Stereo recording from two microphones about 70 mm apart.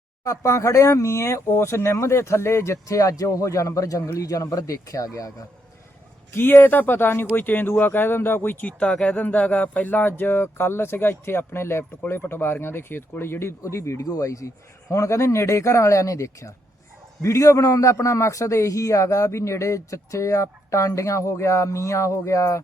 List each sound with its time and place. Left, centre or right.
0.3 s a man's voice: left
6.3 s speech: left
8.6 s a man's voice: centre; by 22.6 s left